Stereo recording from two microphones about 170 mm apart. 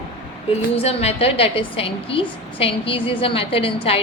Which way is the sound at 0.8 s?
35° left (ahead or behind).